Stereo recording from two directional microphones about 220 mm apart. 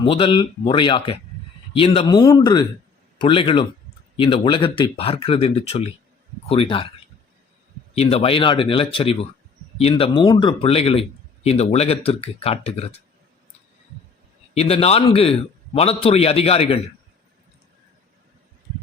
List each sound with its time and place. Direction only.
0.0 s a man's voice: 25° left (ahead or behind)
7.9 s a man's voice: 25° left (ahead or behind)
14.5 s a man's voice: 30° left (ahead or behind)